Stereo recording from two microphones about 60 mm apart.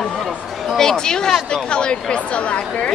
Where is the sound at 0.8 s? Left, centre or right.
Centre.